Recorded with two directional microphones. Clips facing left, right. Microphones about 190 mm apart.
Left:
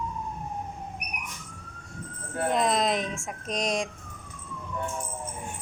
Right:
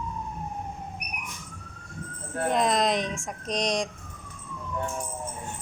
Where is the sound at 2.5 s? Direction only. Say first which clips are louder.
Right 1 dB; centre (ahead or behind).